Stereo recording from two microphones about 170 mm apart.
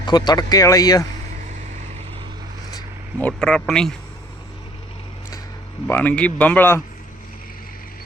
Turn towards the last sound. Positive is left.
turn(degrees=10)  # may be behind; listen again after turning